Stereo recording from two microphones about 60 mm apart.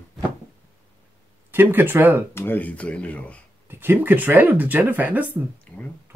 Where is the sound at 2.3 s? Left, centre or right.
Left.